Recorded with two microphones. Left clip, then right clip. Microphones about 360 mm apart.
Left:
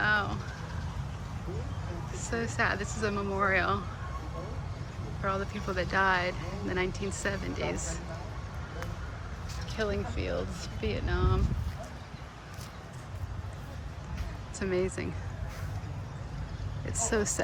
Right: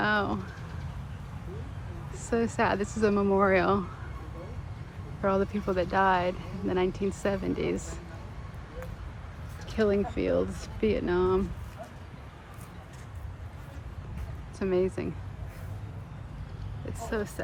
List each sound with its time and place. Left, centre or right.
0.0 s vehicle: centre
2.1 s speech: centre
5.2 s speech: centre
9.7 s speech: centre
14.6 s speech: centre
17.0 s speech: centre